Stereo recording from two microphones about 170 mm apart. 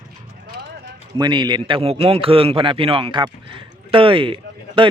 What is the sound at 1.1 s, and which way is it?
A man's voice, 25° right (ahead or behind).